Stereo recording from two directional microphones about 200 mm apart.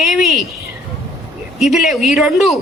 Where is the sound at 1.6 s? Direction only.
Centre (ahead or behind).